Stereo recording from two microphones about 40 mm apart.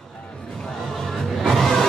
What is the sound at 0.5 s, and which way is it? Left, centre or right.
Music, centre.